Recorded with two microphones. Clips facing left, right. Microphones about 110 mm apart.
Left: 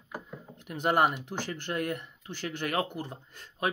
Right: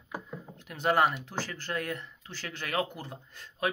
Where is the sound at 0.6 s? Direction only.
15° left (ahead or behind).